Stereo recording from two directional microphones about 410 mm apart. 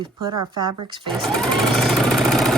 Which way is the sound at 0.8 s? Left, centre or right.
Centre.